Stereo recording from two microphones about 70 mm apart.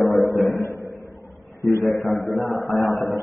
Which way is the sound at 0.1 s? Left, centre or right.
Centre.